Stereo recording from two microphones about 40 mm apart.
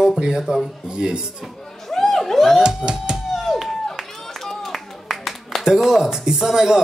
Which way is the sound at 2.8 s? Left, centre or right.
Right.